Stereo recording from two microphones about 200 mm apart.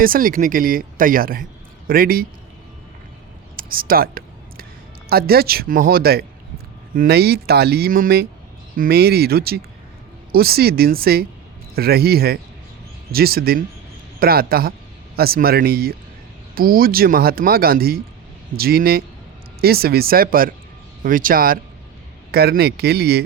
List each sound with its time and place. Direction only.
0.0 s speech: 45° right (ahead or behind)
3.5 s a sound: 45° right (ahead or behind)
5.0 s speech: 50° right (ahead or behind)